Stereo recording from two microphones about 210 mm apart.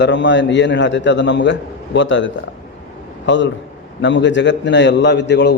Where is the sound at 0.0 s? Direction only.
60° left (ahead or behind).